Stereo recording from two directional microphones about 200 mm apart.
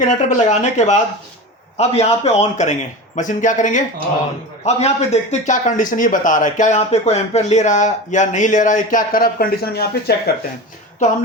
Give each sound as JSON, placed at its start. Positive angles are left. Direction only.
{"t": 0.1, "sound": "speech", "side_deg": 35}